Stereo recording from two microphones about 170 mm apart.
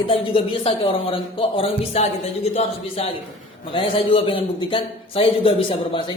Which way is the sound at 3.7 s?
30° left (ahead or behind).